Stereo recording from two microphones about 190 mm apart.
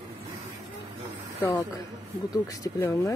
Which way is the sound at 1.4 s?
10° left (ahead or behind).